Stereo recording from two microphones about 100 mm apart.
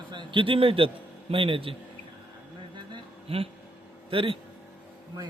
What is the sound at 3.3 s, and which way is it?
A man's voice, 70° right (ahead or behind).